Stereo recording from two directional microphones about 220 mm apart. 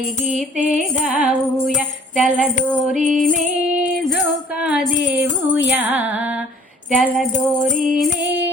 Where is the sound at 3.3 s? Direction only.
35° right (ahead or behind).